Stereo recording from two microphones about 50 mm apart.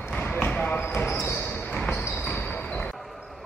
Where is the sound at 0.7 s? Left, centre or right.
Left.